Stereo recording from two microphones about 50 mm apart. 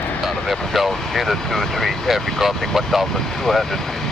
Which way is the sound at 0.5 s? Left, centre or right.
Centre.